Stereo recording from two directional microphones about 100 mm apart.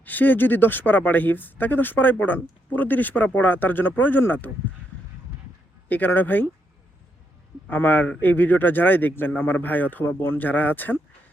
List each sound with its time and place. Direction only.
0.0 s speech: 15° left (ahead or behind)
5.9 s speech: 20° left (ahead or behind)
7.7 s speech: 20° left (ahead or behind)